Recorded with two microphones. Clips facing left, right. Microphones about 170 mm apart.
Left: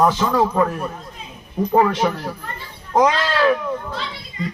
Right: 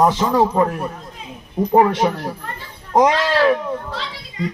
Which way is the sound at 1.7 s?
20° right (ahead or behind).